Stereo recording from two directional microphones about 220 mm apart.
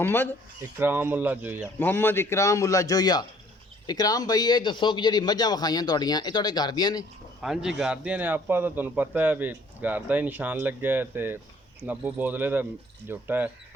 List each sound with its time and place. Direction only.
0.0 s a man's voice: 10° left (ahead or behind)
0.8 s a man's voice: 10° right (ahead or behind)
1.8 s a man's voice: 10° left (ahead or behind)
7.4 s a man's voice: centre (ahead or behind)